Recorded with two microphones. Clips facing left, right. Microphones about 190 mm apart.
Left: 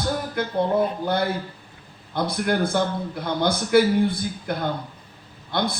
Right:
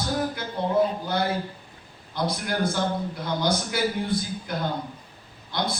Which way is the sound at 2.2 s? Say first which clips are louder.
Left 4 dB; 55° left (ahead or behind).